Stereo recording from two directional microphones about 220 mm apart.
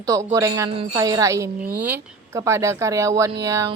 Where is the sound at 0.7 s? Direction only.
25° right (ahead or behind).